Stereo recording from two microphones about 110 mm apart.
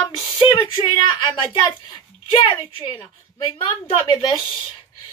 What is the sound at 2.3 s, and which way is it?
Speech, 50° left (ahead or behind).